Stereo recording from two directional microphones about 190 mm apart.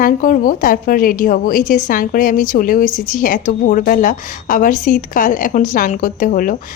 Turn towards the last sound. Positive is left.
turn(degrees=45)  # may be behind; listen again after turning